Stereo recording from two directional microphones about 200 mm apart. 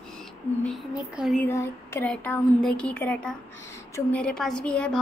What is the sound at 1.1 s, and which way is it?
Speech, 5° right (ahead or behind).